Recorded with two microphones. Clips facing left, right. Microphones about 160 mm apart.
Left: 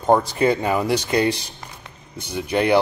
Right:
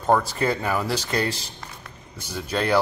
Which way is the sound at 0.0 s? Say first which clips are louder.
Left 4 dB; 20° left (ahead or behind).